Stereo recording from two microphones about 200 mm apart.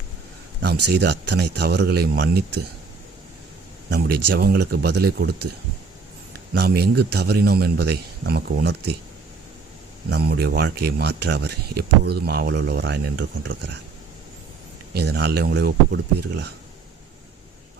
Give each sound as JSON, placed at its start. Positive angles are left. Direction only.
{"t": 0.6, "sound": "speech", "side_deg": -55}
{"t": 3.8, "sound": "speech", "side_deg": -55}
{"t": 6.5, "sound": "speech", "side_deg": -55}
{"t": 10.1, "sound": "speech", "side_deg": -50}
{"t": 14.9, "sound": "speech", "side_deg": -55}